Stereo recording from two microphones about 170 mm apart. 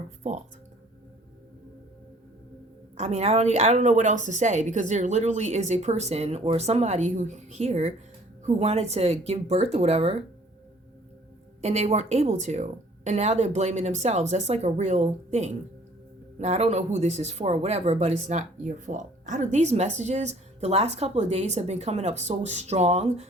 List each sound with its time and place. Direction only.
3.0 s speech: 40° right (ahead or behind)
11.6 s speech: 40° right (ahead or behind)